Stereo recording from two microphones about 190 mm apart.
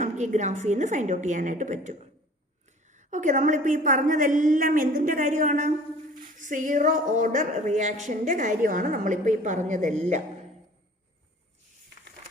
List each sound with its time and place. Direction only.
0.0 s a woman's voice: 40° right (ahead or behind)